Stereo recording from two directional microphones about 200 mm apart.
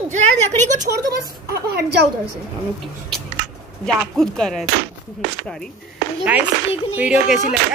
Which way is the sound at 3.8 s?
5° left (ahead or behind).